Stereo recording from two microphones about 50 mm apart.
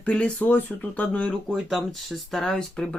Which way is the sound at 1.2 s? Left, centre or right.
Centre.